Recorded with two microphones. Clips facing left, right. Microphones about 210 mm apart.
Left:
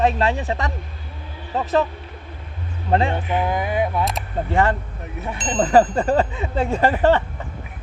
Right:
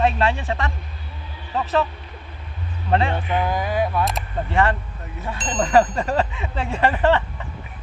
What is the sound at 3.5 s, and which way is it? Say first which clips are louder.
Speech: left 1 dB; 20° left (ahead or behind).